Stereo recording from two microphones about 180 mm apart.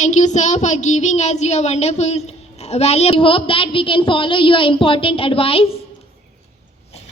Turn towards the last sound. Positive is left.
turn(degrees=30)  # may be behind; listen again after turning